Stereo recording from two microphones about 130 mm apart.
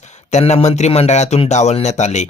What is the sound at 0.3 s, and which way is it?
Speech, 60° left (ahead or behind).